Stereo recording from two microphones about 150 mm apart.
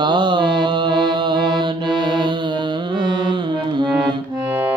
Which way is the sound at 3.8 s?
30° right (ahead or behind).